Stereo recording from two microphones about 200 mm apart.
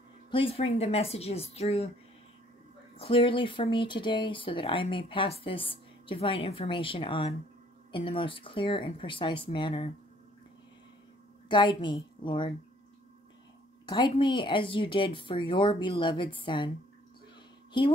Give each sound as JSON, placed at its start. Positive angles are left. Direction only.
{"t": 0.3, "sound": "speech", "side_deg": 25}
{"t": 3.0, "sound": "speech", "side_deg": 25}
{"t": 11.4, "sound": "a woman's voice", "side_deg": 25}
{"t": 13.8, "sound": "speech", "side_deg": 25}
{"t": 17.8, "sound": "speech", "side_deg": 25}